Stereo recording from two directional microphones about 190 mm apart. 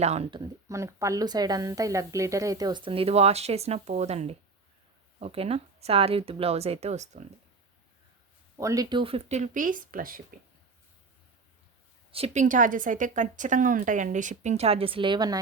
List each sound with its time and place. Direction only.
0.0 s a woman's voice: 35° right (ahead or behind)
8.5 s a woman's voice: 15° right (ahead or behind); by 10.2 s 50° right (ahead or behind)
12.1 s a woman's voice: 35° right (ahead or behind)